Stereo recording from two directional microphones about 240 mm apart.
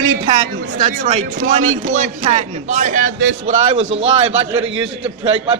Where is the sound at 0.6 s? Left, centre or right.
Right.